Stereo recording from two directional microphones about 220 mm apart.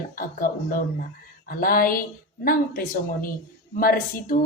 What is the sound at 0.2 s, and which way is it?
Speech, 40° left (ahead or behind).